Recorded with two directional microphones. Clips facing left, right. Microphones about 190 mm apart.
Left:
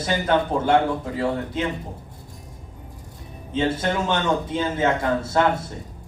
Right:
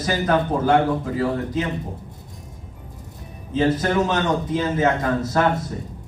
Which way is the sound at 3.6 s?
25° left (ahead or behind).